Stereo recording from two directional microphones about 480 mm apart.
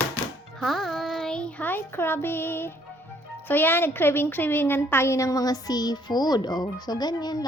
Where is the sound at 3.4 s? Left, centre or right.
Centre.